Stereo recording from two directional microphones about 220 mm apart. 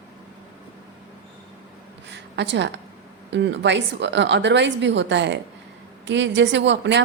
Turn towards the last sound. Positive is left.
turn(degrees=-55)  # may be behind; listen again after turning